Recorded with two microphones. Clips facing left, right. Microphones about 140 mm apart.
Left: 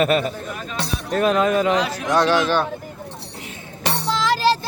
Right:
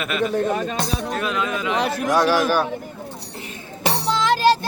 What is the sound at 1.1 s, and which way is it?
Speech, 40° left (ahead or behind).